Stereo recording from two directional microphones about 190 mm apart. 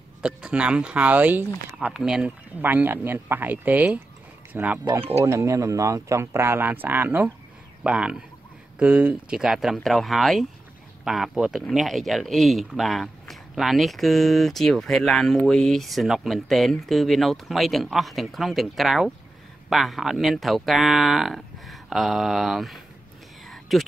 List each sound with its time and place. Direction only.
0.2 s speech: 5° right (ahead or behind)